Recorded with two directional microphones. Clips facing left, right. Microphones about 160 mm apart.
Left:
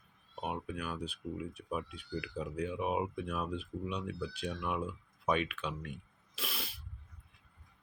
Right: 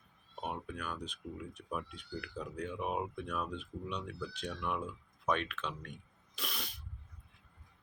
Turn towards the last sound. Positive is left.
turn(degrees=5)  # may be behind; listen again after turning